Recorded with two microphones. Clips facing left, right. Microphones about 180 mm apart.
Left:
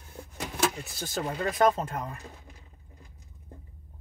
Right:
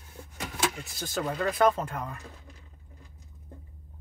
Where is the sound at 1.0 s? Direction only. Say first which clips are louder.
Right 1 dB; 30° left (ahead or behind).